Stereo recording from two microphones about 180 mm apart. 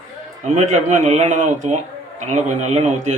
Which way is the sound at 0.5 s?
40° right (ahead or behind).